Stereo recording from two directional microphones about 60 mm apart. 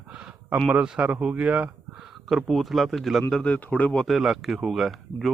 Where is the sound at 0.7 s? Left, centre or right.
Right.